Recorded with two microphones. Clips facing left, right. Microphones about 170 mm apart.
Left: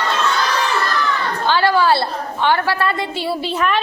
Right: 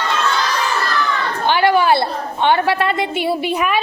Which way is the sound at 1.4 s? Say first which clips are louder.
Right 1 dB; 20° right (ahead or behind).